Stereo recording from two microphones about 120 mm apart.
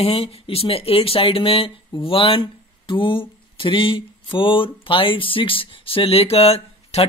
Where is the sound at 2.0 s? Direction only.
50° left (ahead or behind).